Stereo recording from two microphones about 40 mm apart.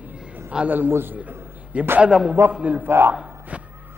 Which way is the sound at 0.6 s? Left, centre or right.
Right.